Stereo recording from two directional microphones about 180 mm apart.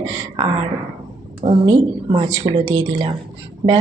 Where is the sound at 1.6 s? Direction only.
30° right (ahead or behind).